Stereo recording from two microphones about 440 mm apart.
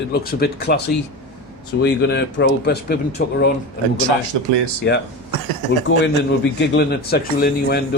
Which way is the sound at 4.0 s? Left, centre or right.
Right.